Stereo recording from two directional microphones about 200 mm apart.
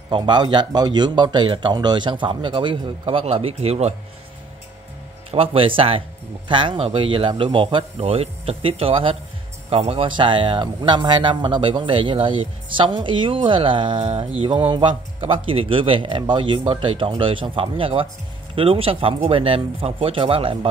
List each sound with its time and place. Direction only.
0.1 s speech: 20° right (ahead or behind)
5.3 s speech: 30° right (ahead or behind)